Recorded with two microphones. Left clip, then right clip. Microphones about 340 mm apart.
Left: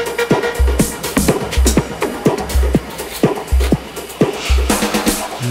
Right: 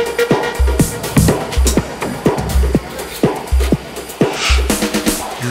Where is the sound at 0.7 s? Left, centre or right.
Centre.